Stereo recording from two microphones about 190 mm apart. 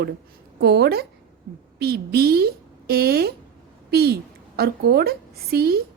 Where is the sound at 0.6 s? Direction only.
60° right (ahead or behind).